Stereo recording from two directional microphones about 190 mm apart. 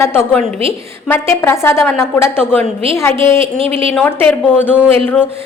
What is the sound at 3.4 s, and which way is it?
Speech, 30° right (ahead or behind).